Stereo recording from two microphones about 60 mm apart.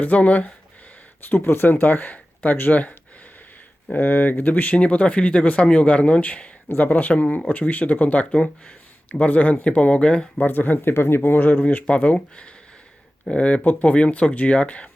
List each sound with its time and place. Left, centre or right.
0.0 s speech: left
1.3 s speech: left
3.9 s speech: left
10.3 s speech: left